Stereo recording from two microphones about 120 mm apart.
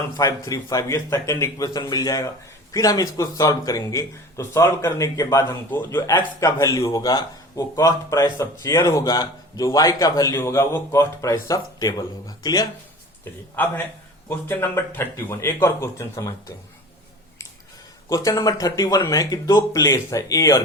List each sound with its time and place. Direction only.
0.2 s a man's voice: 30° left (ahead or behind)
13.6 s a man's voice: 15° left (ahead or behind)
18.1 s a man's voice: 30° left (ahead or behind)